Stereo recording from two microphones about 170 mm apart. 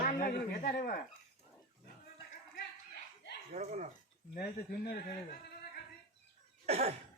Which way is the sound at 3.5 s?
45° right (ahead or behind).